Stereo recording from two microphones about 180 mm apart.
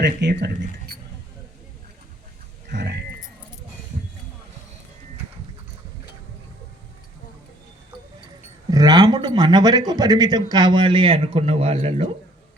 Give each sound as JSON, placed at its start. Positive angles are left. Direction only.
{"t": 0.0, "sound": "speech", "side_deg": -65}
{"t": 2.6, "sound": "speech", "side_deg": -65}
{"t": 8.7, "sound": "speech", "side_deg": -20}